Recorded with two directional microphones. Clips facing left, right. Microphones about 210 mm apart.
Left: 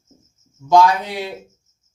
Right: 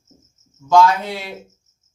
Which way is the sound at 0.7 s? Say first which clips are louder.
Even; 15° left (ahead or behind).